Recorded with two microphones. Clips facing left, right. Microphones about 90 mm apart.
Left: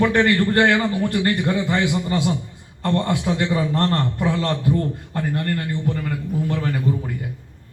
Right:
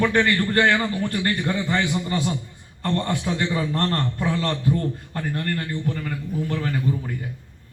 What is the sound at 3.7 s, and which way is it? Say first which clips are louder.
A man's voice: left 3 dB; 25° left (ahead or behind).